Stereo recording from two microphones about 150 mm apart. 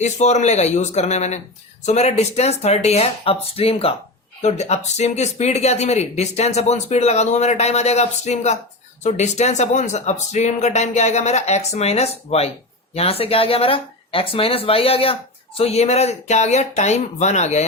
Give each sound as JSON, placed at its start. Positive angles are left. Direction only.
{"t": 0.0, "sound": "speech", "side_deg": 50}